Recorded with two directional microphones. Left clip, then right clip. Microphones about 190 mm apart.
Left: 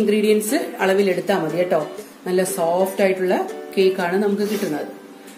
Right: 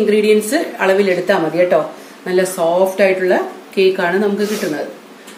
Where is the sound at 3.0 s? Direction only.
25° left (ahead or behind).